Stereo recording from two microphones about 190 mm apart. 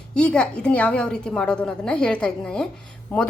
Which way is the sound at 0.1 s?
5° left (ahead or behind).